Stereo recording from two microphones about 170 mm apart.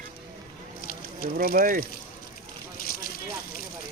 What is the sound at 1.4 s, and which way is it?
Speech, 55° right (ahead or behind).